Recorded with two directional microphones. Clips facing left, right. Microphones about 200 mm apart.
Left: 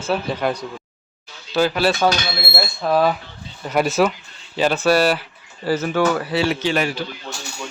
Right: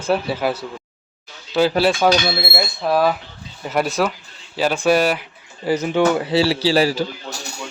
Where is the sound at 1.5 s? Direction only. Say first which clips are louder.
Right 2 dB; 25° right (ahead or behind).